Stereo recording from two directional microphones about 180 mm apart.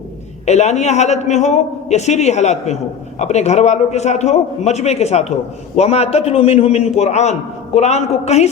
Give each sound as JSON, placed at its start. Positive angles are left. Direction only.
{"t": 0.4, "sound": "a man's voice", "side_deg": 40}